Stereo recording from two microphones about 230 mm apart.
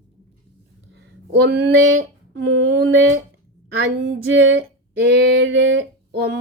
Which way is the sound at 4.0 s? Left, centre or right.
Right.